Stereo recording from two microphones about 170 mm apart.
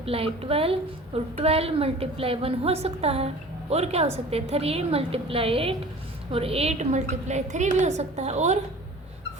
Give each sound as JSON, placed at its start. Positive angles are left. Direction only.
{"t": 0.0, "sound": "a woman's voice", "side_deg": -35}